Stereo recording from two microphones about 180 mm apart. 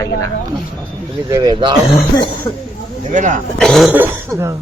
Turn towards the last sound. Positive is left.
turn(degrees=-10)  # may be behind; listen again after turning